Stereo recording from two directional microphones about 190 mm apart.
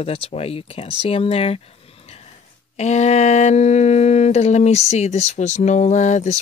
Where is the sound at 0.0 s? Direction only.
30° left (ahead or behind).